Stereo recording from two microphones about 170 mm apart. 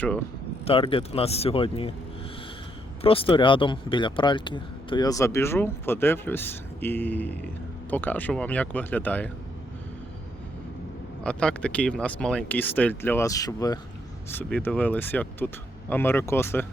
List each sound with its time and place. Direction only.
0.6 s speech: 35° left (ahead or behind)
3.0 s speech: 35° left (ahead or behind); by 9.3 s 10° left (ahead or behind)
11.2 s speech: 5° left (ahead or behind)